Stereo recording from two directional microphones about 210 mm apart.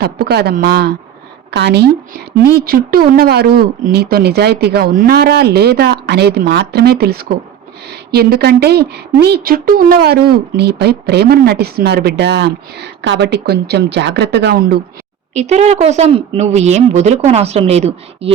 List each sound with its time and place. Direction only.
0.0 s a woman's voice: 50° right (ahead or behind)
15.3 s speech: 30° right (ahead or behind)